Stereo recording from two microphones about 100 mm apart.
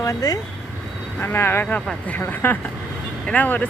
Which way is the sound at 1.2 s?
20° left (ahead or behind).